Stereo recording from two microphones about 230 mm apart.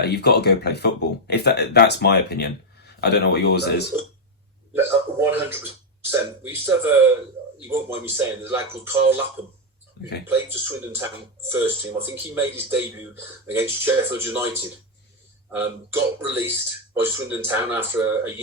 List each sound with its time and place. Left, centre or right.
0.0 s speech: left
4.7 s speech: centre
10.2 s speech: centre